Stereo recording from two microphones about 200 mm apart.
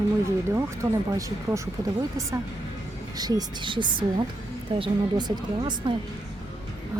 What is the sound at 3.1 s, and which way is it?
A woman's voice, 20° right (ahead or behind).